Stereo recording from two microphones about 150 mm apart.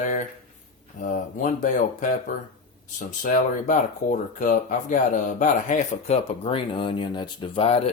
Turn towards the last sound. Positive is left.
turn(degrees=40)  # may be behind; listen again after turning